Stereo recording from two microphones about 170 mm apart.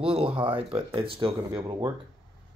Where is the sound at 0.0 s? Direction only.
30° right (ahead or behind).